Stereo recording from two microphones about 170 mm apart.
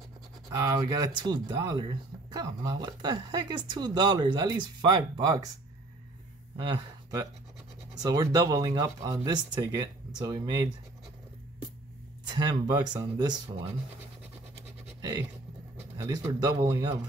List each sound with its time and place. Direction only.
0.6 s speech: 20° right (ahead or behind)
6.5 s speech: 25° right (ahead or behind)
12.3 s speech: 25° right (ahead or behind)
15.0 s a sound: 20° right (ahead or behind)
16.0 s speech: 25° right (ahead or behind)